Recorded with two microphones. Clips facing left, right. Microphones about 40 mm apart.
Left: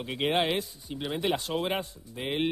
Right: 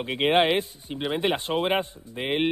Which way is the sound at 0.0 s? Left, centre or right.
Right.